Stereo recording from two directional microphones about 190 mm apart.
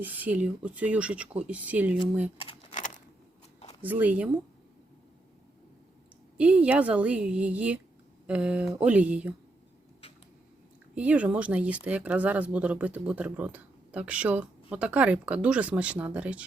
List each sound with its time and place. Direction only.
0.0 s speech: 10° right (ahead or behind)
2.4 s keys jangling: 30° left (ahead or behind)
2.7 s a sound: 40° left (ahead or behind)
3.8 s speech: 10° right (ahead or behind)
6.3 s speech: 5° right (ahead or behind)
10.9 s speech: 5° right (ahead or behind)